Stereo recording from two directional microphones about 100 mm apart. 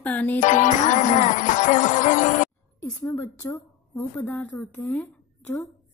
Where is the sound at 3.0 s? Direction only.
25° left (ahead or behind).